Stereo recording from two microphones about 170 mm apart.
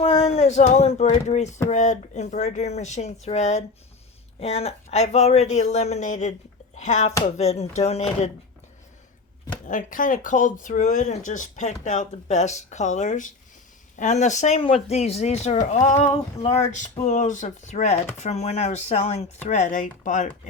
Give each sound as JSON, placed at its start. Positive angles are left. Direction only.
{"t": 0.0, "sound": "speech", "side_deg": 35}
{"t": 9.6, "sound": "speech", "side_deg": 50}